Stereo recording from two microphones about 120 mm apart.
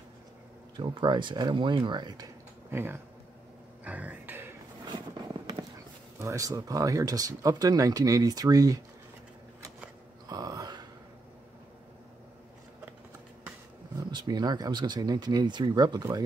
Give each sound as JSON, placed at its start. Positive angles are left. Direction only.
{"t": 0.7, "sound": "speech", "side_deg": -40}
{"t": 2.7, "sound": "speech", "side_deg": -20}
{"t": 3.8, "sound": "a sound", "side_deg": -10}
{"t": 4.8, "sound": "fireworks", "side_deg": -35}
{"t": 6.1, "sound": "speech", "side_deg": -25}
{"t": 10.2, "sound": "burping", "side_deg": -30}
{"t": 13.9, "sound": "speech", "side_deg": -35}